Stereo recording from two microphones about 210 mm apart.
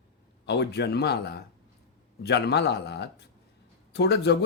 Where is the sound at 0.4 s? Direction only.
55° left (ahead or behind).